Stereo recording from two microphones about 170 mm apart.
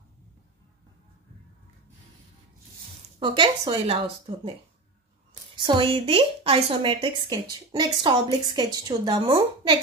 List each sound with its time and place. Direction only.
3.2 s a woman's voice: 30° right (ahead or behind)
5.6 s a woman's voice: 30° right (ahead or behind)